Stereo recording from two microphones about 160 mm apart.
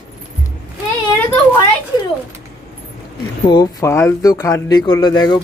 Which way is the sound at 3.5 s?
25° left (ahead or behind).